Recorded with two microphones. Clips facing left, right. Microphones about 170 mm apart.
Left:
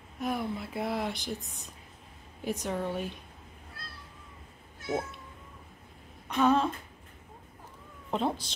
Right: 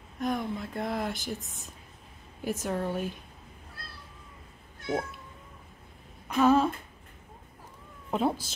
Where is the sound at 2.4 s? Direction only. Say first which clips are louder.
Right 1 dB; 5° right (ahead or behind).